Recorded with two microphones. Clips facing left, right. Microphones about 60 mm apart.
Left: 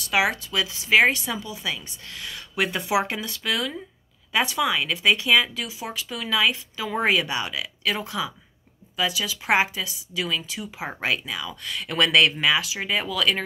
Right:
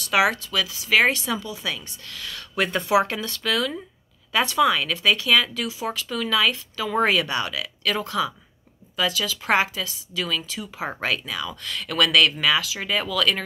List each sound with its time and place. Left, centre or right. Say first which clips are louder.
0.0 s a woman's voice: right 2 dB; centre
0.5 s speech: even; left
0.9 s speech: left 1 dB; centre
2.0 s speech: even; left
5.5 s speech: right 4 dB; centre